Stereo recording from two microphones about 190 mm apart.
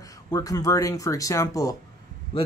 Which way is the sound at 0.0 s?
20° left (ahead or behind).